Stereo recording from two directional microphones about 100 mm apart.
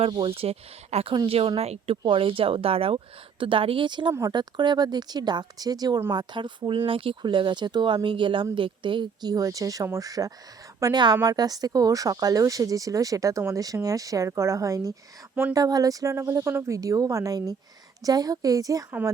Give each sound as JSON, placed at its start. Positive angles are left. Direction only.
{"t": 0.1, "sound": "speech", "side_deg": -65}
{"t": 1.3, "sound": "speech", "side_deg": -70}
{"t": 6.1, "sound": "speech", "side_deg": -55}
{"t": 9.3, "sound": "speech", "side_deg": -35}
{"t": 10.9, "sound": "speech", "side_deg": -45}